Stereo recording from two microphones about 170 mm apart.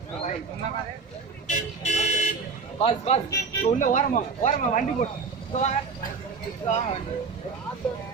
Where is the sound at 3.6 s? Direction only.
50° left (ahead or behind).